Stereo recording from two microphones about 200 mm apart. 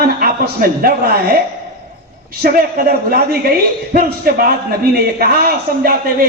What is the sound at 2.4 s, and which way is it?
A man's voice, 50° right (ahead or behind).